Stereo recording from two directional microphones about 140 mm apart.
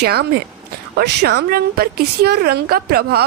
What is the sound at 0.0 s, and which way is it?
Speech, 90° right.